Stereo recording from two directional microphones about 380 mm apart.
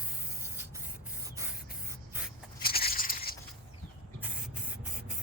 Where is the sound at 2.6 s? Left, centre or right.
Left.